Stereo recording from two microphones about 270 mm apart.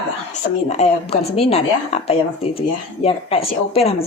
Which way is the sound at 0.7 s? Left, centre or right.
Left.